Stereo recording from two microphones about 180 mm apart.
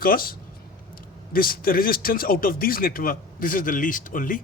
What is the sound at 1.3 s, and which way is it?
Speech, 55° left (ahead or behind).